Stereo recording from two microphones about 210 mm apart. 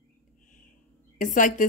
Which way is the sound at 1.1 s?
40° left (ahead or behind).